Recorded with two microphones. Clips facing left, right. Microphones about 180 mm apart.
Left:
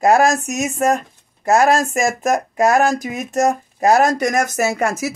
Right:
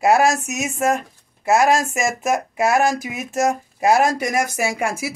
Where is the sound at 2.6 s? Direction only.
45° left (ahead or behind).